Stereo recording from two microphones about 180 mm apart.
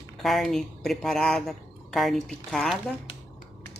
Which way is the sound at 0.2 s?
Centre (ahead or behind).